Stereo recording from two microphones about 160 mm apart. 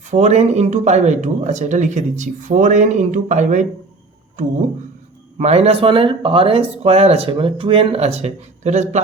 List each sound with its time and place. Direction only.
0.1 s speech: 45° right (ahead or behind)
5.4 s speech: 40° right (ahead or behind)